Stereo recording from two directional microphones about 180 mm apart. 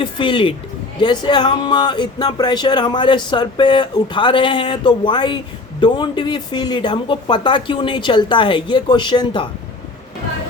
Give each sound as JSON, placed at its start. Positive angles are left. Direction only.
{"t": 0.0, "sound": "speech", "side_deg": 25}